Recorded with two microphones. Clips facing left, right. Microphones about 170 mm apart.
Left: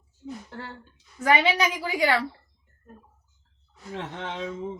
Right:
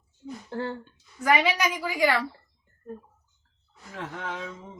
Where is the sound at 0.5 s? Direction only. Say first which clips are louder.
Right 8 dB; 30° right (ahead or behind).